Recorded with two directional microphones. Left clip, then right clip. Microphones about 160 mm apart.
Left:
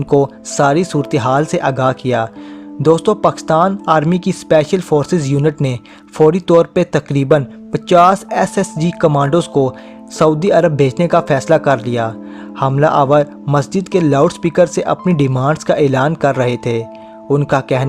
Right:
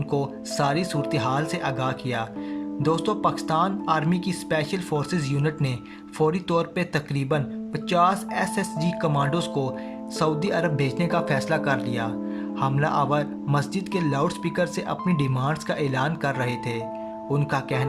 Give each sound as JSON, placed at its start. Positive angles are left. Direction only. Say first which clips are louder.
{"t": 0.0, "sound": "a man's voice", "louder": "left 14 dB", "side_deg": 45}